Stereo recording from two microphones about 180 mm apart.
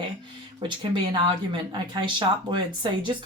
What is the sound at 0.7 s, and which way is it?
Speech, 25° right (ahead or behind).